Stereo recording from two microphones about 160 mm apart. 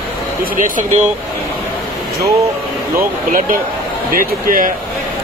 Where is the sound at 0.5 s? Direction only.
55° right (ahead or behind).